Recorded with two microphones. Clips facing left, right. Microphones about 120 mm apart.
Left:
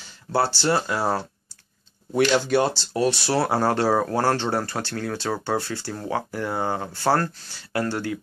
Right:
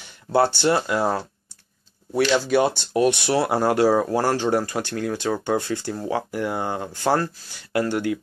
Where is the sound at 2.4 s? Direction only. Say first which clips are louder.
Right 2 dB; 10° right (ahead or behind).